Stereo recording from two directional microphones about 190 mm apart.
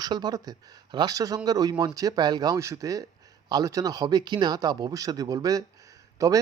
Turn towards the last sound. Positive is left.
turn(degrees=-15)  # may be behind; listen again after turning